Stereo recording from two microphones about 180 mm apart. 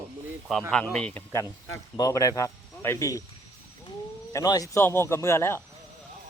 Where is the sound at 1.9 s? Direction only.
15° left (ahead or behind).